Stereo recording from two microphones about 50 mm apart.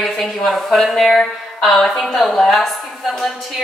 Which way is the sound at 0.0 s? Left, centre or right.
Centre.